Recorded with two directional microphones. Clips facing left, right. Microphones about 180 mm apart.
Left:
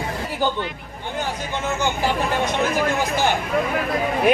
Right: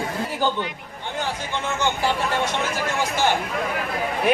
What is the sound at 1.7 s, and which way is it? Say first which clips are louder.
Speech: even; 10° left (ahead or behind).